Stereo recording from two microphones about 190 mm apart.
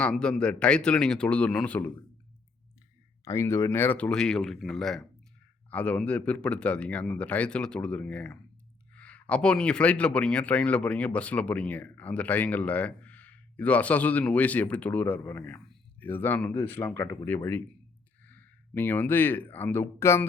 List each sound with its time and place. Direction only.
0.0 s a man's voice: 5° left (ahead or behind)
3.2 s a man's voice: 15° left (ahead or behind)